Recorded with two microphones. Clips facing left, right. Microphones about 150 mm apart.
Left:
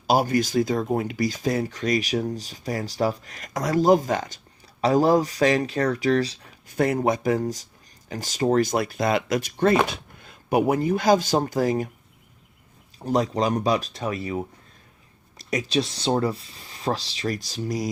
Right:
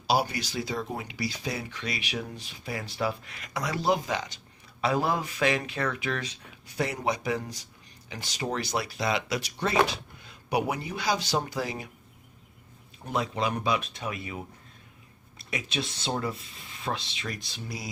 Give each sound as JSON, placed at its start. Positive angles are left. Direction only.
{"t": 0.1, "sound": "speech", "side_deg": 45}
{"t": 6.7, "sound": "speech", "side_deg": 50}
{"t": 13.1, "sound": "speech", "side_deg": 40}